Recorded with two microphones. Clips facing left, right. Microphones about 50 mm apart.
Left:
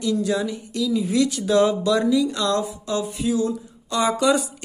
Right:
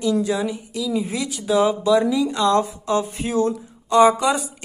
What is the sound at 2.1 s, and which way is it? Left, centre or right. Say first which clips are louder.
Speech: right 2 dB; right.